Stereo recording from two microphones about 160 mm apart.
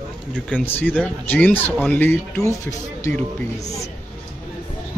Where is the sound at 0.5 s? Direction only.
10° left (ahead or behind).